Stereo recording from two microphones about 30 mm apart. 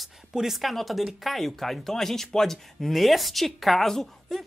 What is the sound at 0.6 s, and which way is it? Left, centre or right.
Speech, centre.